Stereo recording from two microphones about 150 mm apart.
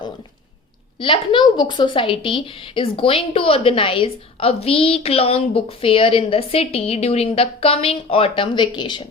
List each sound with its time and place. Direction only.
0.9 s a woman's voice: 35° left (ahead or behind)